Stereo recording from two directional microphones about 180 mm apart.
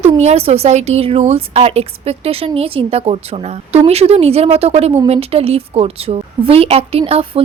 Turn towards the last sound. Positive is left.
turn(degrees=-35)  # may be behind; listen again after turning